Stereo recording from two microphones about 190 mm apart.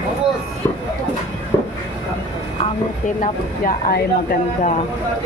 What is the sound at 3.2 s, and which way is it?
Speech, 45° left (ahead or behind).